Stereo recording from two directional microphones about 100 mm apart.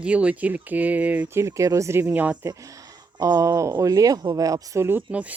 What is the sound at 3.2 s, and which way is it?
Speech, 35° right (ahead or behind).